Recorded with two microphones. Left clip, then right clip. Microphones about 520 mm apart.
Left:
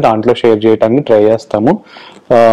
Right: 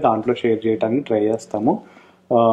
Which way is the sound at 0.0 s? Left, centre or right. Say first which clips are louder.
Left 9 dB; left.